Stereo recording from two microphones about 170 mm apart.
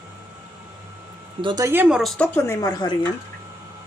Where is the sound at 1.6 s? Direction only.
10° right (ahead or behind); by 2.9 s 25° left (ahead or behind).